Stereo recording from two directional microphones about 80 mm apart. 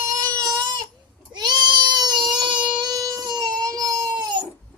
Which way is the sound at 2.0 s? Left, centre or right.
Right.